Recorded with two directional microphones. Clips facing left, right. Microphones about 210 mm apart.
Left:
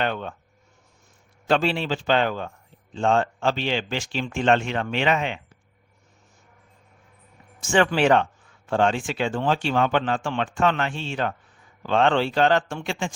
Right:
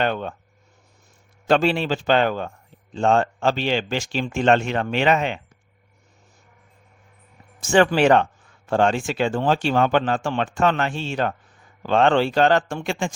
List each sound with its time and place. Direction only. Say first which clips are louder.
0.0 s speech: right 3 dB; 40° right (ahead or behind)
1.5 s speech: right 3 dB; 45° right (ahead or behind)
7.6 s speech: right 3 dB; 35° right (ahead or behind)